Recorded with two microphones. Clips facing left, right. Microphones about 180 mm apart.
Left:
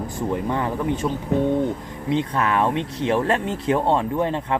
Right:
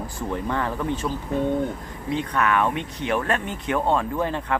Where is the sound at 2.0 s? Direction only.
25° left (ahead or behind).